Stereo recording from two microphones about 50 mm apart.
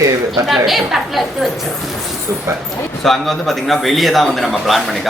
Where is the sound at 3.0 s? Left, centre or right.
Centre.